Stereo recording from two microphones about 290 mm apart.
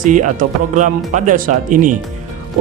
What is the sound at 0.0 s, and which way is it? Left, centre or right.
Speech, right.